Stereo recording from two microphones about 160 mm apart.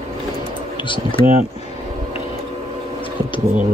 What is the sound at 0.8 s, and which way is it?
Speech, 30° left (ahead or behind).